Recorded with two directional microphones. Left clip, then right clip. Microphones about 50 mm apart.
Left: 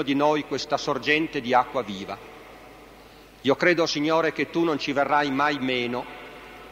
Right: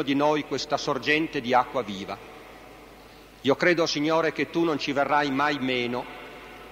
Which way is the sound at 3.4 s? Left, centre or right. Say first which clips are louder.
Left 1 dB; right.